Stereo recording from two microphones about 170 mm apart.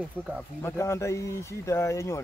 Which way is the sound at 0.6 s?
15° left (ahead or behind).